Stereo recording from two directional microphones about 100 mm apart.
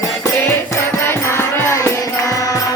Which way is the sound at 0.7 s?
25° left (ahead or behind).